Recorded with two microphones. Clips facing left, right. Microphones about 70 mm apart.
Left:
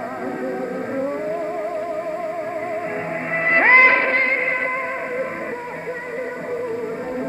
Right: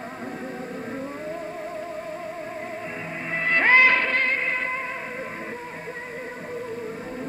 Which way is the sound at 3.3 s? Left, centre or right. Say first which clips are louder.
Left 4 dB; left.